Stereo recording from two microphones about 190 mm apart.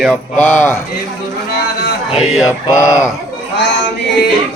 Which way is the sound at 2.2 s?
Centre (ahead or behind).